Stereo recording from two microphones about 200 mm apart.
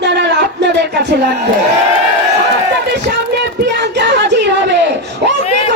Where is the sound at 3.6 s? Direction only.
60° right (ahead or behind).